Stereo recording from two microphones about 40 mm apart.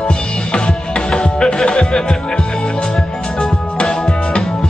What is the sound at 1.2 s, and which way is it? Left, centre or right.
Music, left.